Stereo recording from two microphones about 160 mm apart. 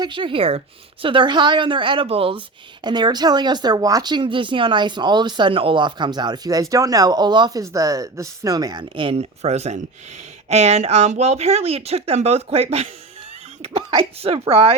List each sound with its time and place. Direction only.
0.0 s speech: 30° right (ahead or behind)